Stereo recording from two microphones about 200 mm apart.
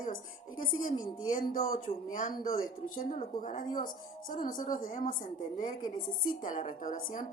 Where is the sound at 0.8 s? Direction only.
40° left (ahead or behind).